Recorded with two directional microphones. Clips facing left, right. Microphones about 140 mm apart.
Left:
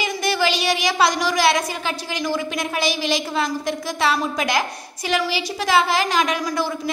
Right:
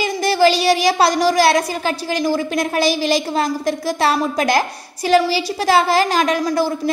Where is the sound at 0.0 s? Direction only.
35° right (ahead or behind).